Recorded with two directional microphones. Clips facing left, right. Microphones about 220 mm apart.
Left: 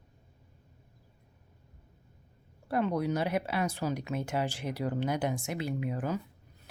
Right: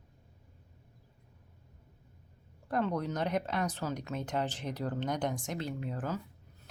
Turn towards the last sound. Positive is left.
turn(degrees=15)  # may be behind; listen again after turning